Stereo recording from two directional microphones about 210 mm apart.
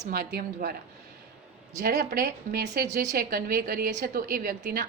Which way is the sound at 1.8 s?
45° right (ahead or behind).